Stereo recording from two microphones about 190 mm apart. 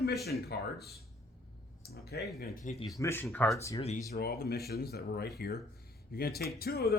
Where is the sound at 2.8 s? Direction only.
20° left (ahead or behind).